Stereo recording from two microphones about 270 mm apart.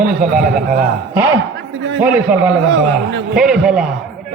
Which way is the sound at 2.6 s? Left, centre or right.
Right.